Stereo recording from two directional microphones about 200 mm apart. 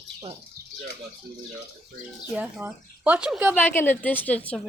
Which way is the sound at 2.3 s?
5° right (ahead or behind).